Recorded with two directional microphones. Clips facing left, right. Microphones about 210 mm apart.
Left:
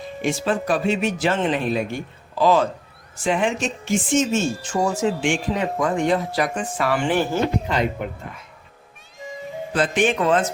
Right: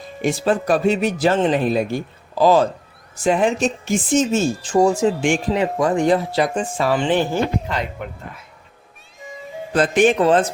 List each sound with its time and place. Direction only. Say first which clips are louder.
0.2 s speech: right 3 dB; 40° right (ahead or behind); by 7.3 s 20° right (ahead or behind)
8.0 s speech: left 2 dB; 5° left (ahead or behind)
9.7 s speech: right 5 dB; 45° right (ahead or behind)